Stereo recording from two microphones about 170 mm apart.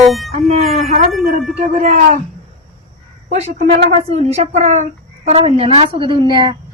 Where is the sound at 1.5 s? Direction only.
40° right (ahead or behind).